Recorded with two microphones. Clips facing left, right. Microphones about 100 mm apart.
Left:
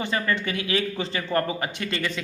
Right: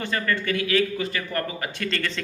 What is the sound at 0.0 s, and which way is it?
Speech, 20° left (ahead or behind).